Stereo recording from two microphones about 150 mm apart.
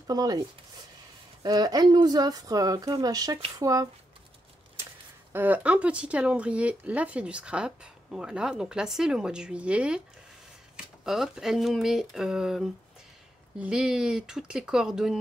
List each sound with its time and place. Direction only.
0.0 s speech: 25° right (ahead or behind)
1.4 s speech: 25° right (ahead or behind)
5.3 s speech: 10° right (ahead or behind)
11.1 s speech: 5° right (ahead or behind)